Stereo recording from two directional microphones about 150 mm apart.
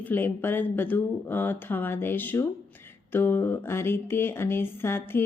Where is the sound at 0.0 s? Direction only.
15° left (ahead or behind).